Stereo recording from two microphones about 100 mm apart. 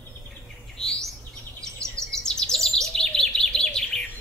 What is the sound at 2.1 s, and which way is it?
Bird, 5° left (ahead or behind).